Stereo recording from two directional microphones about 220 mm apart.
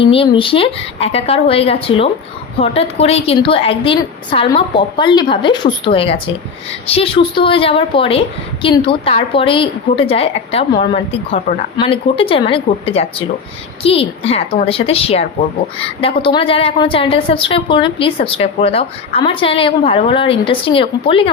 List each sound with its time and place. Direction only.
0.0 s a woman's voice: 25° left (ahead or behind)